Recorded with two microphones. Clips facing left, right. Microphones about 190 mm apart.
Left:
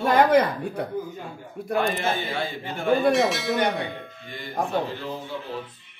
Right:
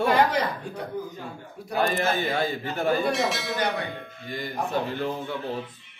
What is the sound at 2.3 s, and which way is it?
Speech, 40° right (ahead or behind).